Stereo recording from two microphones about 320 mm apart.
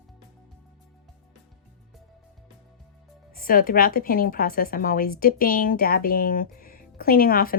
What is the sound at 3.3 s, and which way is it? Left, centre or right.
A woman's voice, left.